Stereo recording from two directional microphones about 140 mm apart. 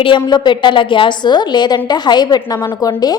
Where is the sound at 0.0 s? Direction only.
35° left (ahead or behind).